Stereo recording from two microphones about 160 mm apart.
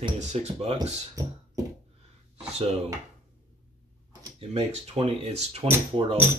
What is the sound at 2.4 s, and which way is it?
Speech, 40° right (ahead or behind).